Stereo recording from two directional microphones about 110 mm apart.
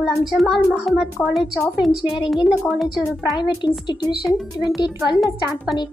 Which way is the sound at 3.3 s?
45° left (ahead or behind).